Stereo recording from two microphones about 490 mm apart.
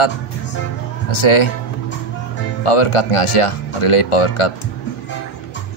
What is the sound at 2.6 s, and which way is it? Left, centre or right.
Speech, left.